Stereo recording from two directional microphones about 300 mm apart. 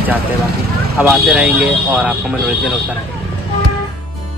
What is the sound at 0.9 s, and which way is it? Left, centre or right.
A man's voice, centre.